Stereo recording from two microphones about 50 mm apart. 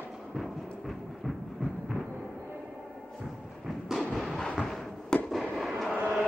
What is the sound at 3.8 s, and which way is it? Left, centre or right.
Artillery fire, centre.